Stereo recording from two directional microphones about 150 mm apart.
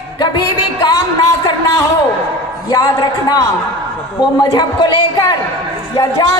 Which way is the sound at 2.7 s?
25° left (ahead or behind).